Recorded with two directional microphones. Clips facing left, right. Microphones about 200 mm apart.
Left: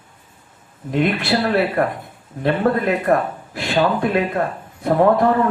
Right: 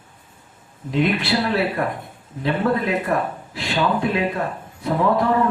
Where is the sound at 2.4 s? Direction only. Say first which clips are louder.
Left 3 dB; 50° left (ahead or behind).